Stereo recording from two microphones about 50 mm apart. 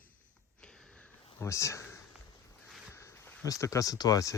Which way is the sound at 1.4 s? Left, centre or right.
Left.